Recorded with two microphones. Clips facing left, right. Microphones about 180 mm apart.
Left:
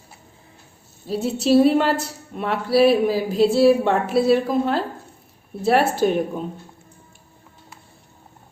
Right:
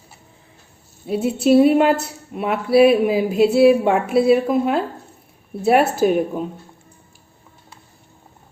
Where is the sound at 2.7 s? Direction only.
55° right (ahead or behind).